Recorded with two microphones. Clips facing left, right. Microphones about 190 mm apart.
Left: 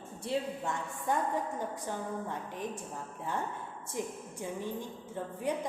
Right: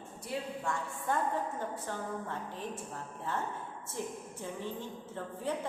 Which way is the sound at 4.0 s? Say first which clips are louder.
Left 2 dB; 15° left (ahead or behind).